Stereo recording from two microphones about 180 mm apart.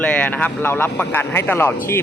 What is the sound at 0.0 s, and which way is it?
A man's voice, 10° left (ahead or behind).